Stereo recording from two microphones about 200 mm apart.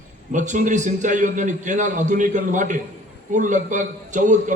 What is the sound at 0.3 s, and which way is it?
A man's voice, 40° right (ahead or behind).